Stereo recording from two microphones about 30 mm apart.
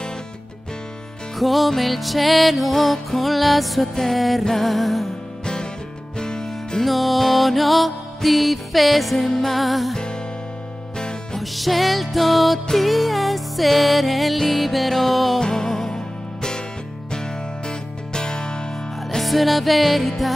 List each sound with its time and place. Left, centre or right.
1.4 s music: centre
5.4 s music: left
6.8 s music: centre
11.3 s music: centre
15.4 s music: centre
17.6 s music: left
19.0 s music: centre